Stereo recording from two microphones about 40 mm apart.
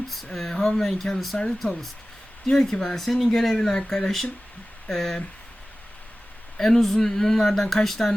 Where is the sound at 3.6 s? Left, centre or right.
Centre.